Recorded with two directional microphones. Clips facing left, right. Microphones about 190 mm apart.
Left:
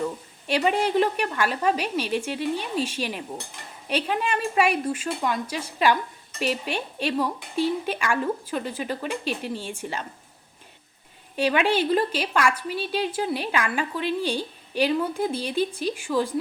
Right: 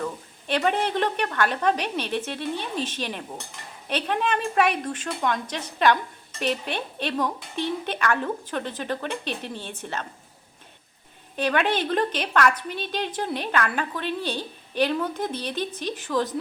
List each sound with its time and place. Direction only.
0.0 s a woman's voice: 10° left (ahead or behind)
11.3 s a woman's voice: 10° left (ahead or behind)